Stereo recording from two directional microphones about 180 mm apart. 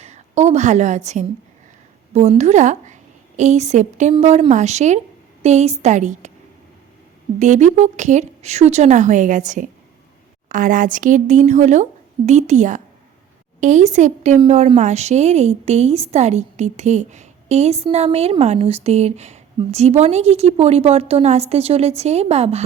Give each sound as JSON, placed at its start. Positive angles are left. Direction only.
{"t": 0.0, "sound": "a woman's voice", "side_deg": -40}
{"t": 7.3, "sound": "a woman's voice", "side_deg": -40}